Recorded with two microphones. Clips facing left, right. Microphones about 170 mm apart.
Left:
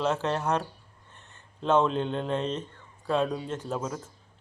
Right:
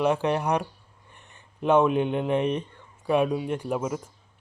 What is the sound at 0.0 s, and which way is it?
Speech, 15° right (ahead or behind).